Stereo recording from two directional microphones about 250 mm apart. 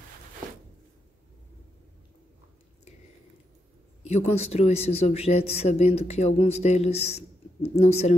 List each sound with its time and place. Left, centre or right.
4.0 s speech: left